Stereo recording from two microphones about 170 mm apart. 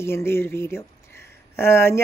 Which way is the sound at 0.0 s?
15° left (ahead or behind).